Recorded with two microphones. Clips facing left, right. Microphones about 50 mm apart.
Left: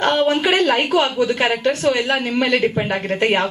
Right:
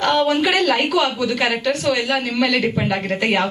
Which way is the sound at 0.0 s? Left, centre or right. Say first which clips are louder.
Even; left.